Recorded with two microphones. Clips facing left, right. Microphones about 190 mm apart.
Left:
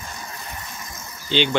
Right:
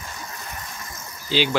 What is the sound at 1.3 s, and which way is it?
Speech, 5° right (ahead or behind).